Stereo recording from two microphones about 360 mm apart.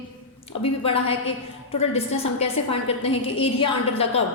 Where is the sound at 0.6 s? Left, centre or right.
Centre.